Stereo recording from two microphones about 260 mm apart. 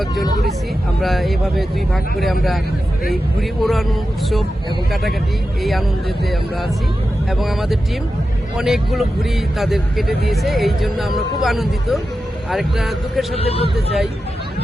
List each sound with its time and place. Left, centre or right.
1.0 s speech: centre
3.6 s speech: centre
7.3 s speech: centre
13.3 s speech: left